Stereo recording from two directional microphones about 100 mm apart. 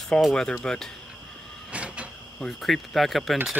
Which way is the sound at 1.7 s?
10° right (ahead or behind).